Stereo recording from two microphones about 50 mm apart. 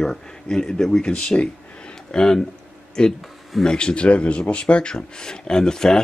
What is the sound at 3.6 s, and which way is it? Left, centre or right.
Speech, centre.